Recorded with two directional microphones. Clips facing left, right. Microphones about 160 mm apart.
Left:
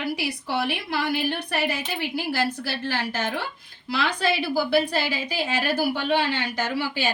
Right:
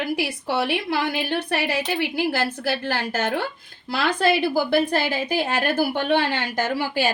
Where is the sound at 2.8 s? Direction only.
50° right (ahead or behind).